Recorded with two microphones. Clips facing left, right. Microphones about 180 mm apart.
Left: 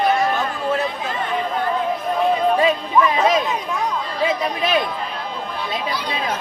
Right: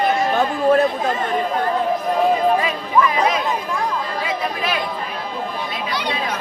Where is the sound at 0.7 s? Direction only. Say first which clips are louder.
Right 8 dB; 55° right (ahead or behind).